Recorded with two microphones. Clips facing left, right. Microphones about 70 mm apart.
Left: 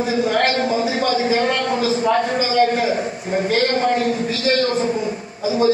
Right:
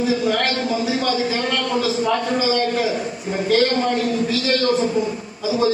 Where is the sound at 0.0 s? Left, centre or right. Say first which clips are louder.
Left 1 dB; left.